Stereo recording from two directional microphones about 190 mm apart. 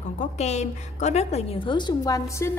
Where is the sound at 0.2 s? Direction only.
35° left (ahead or behind).